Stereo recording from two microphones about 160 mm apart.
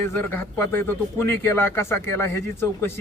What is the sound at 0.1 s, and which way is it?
Speech, 15° left (ahead or behind).